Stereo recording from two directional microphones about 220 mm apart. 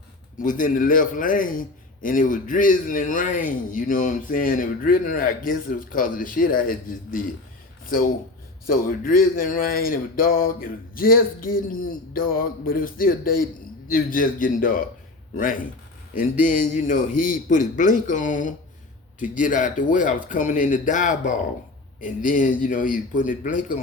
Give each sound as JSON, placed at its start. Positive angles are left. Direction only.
{"t": 0.3, "sound": "a man's voice", "side_deg": 40}